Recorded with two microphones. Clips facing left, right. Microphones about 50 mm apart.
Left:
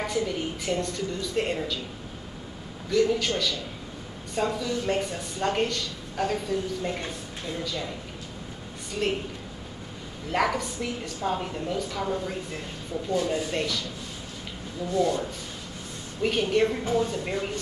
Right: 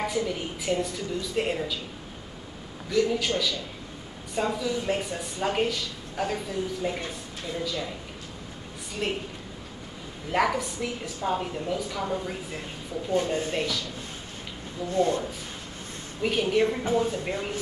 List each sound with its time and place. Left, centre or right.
0.0 s speech: centre
2.9 s speech: centre
9.0 s a woman's voice: centre
10.3 s speech: centre
13.1 s speech: right
13.5 s speech: centre
14.9 s speech: right
16.2 s speech: centre